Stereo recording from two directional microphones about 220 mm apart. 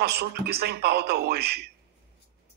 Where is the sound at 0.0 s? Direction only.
45° right (ahead or behind).